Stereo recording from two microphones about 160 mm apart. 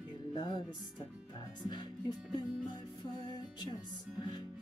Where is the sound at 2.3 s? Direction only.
25° left (ahead or behind).